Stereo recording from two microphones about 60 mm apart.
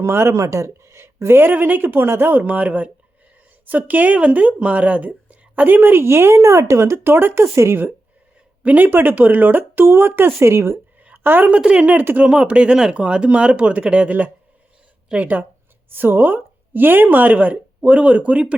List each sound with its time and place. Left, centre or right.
0.0 s speech: right
1.5 s a woman's voice: right
2.0 s a woman's voice: right
2.4 s a woman's voice: right
7.0 s a woman's voice: right
7.4 s speech: right
8.6 s a woman's voice: right
11.0 s a sound: right
11.5 s a woman's voice: centre